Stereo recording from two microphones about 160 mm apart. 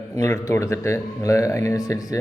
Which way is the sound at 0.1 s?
20° left (ahead or behind).